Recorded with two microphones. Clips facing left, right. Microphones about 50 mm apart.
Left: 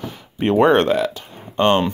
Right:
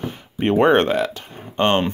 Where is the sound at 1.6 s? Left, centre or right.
Right.